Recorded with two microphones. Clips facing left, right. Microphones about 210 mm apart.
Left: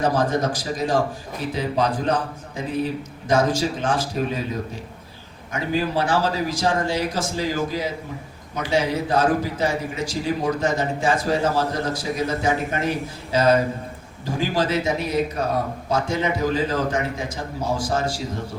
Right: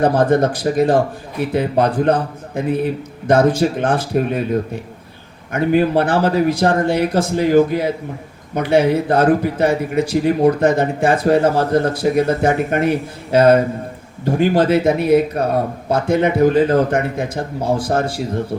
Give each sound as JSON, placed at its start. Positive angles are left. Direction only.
{"t": 0.0, "sound": "a man's voice", "side_deg": -55}